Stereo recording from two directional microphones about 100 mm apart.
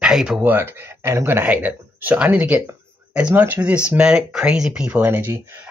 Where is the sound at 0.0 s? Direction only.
5° right (ahead or behind).